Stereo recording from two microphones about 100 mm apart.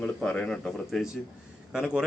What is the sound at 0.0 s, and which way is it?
A man's voice, 10° left (ahead or behind).